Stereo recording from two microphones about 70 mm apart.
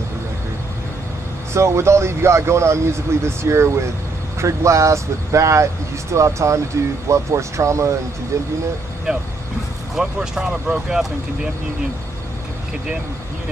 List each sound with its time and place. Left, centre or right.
1.5 s speech: right
9.9 s speech: centre